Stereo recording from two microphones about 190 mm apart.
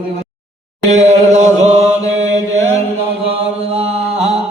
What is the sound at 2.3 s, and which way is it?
Mantra, 35° right (ahead or behind).